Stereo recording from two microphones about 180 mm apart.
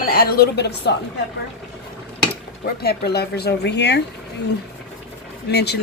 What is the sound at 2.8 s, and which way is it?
A woman's voice, 60° left (ahead or behind).